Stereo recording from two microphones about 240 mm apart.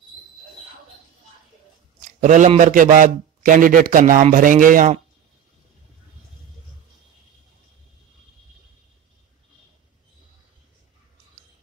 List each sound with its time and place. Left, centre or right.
2.0 s a man's voice: right